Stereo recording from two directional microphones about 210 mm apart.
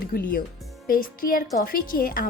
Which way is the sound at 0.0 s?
45° left (ahead or behind).